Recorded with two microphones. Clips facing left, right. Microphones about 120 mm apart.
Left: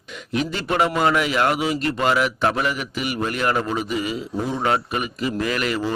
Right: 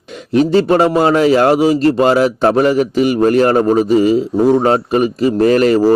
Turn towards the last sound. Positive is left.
turn(degrees=-40)  # may be behind; listen again after turning